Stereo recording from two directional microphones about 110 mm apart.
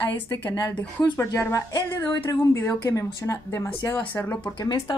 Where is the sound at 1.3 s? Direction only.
25° left (ahead or behind).